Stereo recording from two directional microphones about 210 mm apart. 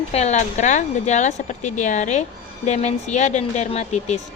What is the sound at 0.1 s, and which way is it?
Speech, 30° left (ahead or behind).